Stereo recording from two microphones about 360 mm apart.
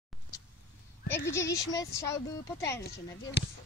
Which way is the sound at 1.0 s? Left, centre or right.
Centre.